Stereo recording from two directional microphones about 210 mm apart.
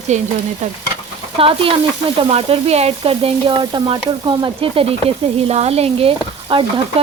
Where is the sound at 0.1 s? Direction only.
35° right (ahead or behind).